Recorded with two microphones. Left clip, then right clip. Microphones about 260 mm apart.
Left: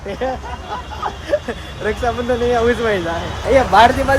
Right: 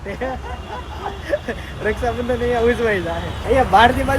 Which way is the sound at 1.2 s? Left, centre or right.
Centre.